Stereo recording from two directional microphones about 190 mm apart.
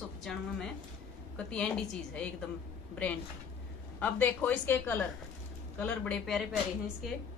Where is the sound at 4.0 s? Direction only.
10° left (ahead or behind).